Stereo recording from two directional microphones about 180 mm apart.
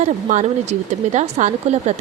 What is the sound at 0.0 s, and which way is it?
A woman's voice, 40° right (ahead or behind).